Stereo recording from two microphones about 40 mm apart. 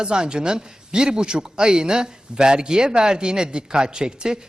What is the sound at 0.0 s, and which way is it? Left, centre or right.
A man's voice, right.